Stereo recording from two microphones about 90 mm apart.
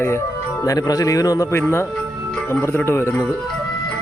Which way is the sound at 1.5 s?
30° left (ahead or behind).